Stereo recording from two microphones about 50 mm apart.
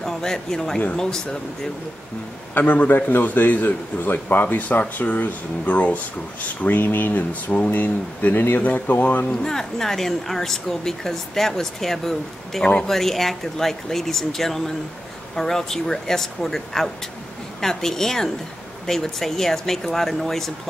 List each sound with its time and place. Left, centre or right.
0.0 s speech: centre
2.5 s a man's voice: left
9.4 s speech: centre